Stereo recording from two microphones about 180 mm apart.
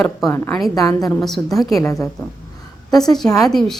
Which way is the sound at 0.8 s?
20° left (ahead or behind).